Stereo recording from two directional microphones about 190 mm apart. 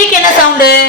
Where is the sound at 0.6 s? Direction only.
55° left (ahead or behind).